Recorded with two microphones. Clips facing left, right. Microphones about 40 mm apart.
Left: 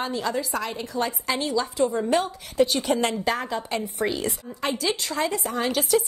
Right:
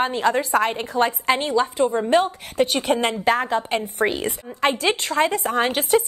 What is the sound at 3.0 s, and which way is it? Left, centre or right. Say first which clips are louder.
A woman's voice: right 5 dB; right.